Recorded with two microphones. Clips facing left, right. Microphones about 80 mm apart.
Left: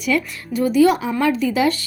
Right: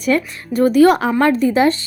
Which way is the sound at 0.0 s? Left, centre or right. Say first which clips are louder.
Right 3 dB; right.